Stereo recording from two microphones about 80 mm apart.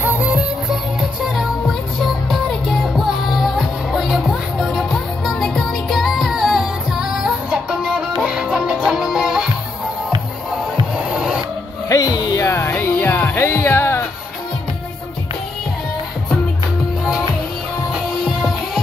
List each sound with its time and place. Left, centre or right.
0.0 s music: centre
1.2 s music: centre
11.1 s a sound: centre
11.9 s music: left
17.9 s music: centre